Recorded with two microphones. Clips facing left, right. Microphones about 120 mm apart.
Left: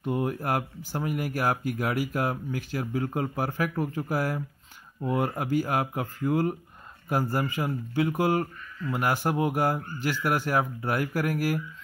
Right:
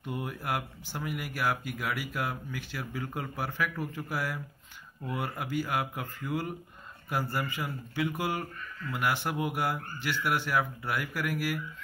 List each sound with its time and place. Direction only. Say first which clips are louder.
0.0 s speech: left 8 dB; 40° left (ahead or behind)